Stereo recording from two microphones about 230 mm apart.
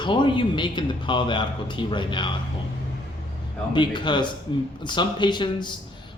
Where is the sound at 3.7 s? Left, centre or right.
Centre.